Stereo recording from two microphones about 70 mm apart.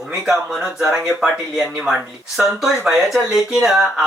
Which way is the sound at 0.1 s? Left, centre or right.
Centre.